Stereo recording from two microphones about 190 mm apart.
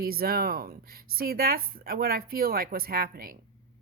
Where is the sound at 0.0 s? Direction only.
50° right (ahead or behind).